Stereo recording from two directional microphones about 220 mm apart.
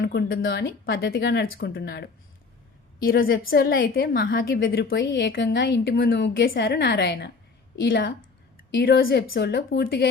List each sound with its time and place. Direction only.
0.0 s a woman's voice: 45° left (ahead or behind)